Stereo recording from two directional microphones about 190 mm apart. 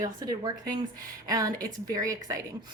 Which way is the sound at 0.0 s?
20° right (ahead or behind).